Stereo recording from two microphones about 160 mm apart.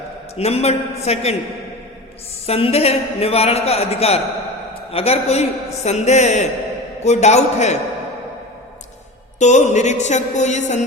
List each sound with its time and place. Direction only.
0.3 s a man's voice: 40° left (ahead or behind)
2.5 s a man's voice: 40° left (ahead or behind)
9.4 s a man's voice: 50° left (ahead or behind)